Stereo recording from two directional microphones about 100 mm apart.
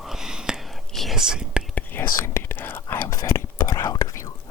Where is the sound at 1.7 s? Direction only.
20° left (ahead or behind).